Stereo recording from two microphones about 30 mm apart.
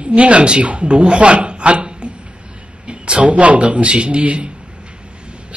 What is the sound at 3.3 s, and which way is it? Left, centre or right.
A woman's voice, right.